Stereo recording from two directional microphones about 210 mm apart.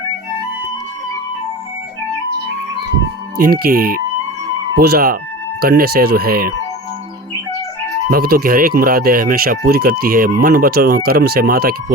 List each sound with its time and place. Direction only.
3.3 s speech: 45° right (ahead or behind)
8.1 s speech: 45° right (ahead or behind)